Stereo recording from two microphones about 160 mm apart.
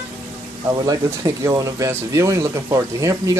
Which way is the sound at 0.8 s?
20° right (ahead or behind).